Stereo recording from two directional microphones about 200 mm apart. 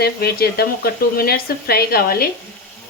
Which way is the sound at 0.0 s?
50° left (ahead or behind).